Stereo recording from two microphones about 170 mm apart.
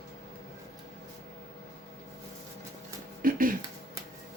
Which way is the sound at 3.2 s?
55° right (ahead or behind).